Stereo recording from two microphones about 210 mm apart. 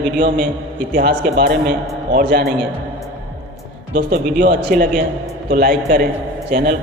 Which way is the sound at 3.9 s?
50° right (ahead or behind).